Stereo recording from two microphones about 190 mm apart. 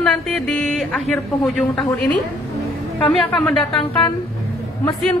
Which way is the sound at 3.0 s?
5° left (ahead or behind).